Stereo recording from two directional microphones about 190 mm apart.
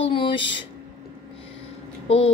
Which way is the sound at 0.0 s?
25° left (ahead or behind).